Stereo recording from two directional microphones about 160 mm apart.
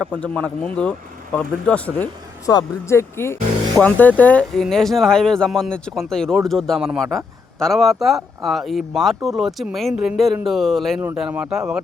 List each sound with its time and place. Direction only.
0.1 s speech: 10° left (ahead or behind)
2.5 s speech: 20° left (ahead or behind); by 11.8 s 5° right (ahead or behind)